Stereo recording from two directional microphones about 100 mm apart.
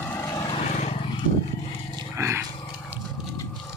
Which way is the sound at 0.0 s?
20° left (ahead or behind).